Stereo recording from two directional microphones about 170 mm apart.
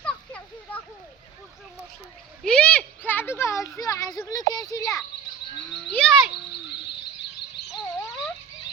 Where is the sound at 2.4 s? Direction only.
5° left (ahead or behind); by 5.0 s 20° left (ahead or behind).